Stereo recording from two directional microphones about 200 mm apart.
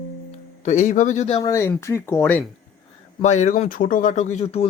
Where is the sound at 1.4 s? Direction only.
15° left (ahead or behind).